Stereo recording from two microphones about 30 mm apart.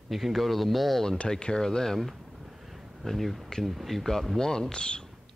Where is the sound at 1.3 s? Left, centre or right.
Left.